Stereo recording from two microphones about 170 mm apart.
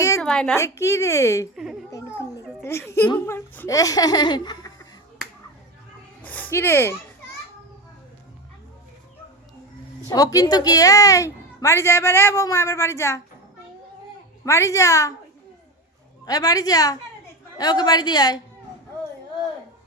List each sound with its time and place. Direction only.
0.2 s a woman's voice: 5° left (ahead or behind)
0.5 s a woman's voice: 15° left (ahead or behind)
2.6 s a woman's voice: 15° left (ahead or behind)
6.2 s speech: 10° left (ahead or behind)
10.1 s a woman's voice: 20° left (ahead or behind)
14.4 s a woman's voice: 15° left (ahead or behind)
16.2 s speech: 20° left (ahead or behind)